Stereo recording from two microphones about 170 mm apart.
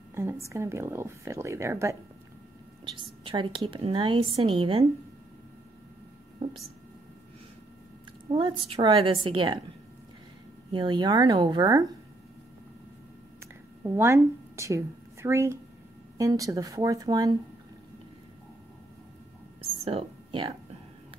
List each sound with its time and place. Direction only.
0.1 s speech: 15° right (ahead or behind)
3.3 s speech: 30° right (ahead or behind)
6.4 s speech: 40° right (ahead or behind)
8.3 s speech: 30° right (ahead or behind)
10.7 s speech: 25° right (ahead or behind)
13.8 s speech: 15° right (ahead or behind)
19.8 s a sound: 35° right (ahead or behind)